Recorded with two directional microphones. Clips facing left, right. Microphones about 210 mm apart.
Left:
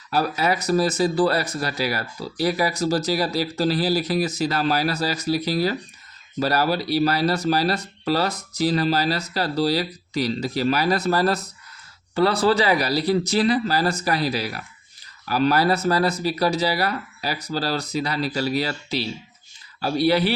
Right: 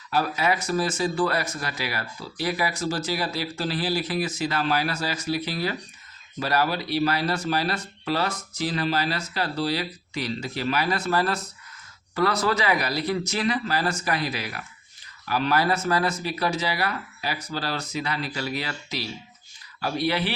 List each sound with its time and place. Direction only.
0.1 s speech: 40° left (ahead or behind)